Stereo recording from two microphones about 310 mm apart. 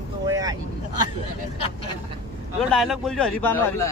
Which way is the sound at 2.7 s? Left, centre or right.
Centre.